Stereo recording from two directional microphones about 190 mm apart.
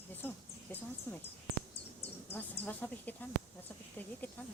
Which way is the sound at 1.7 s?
30° left (ahead or behind).